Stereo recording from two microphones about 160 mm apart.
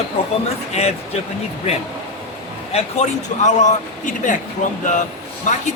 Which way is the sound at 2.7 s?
45° left (ahead or behind).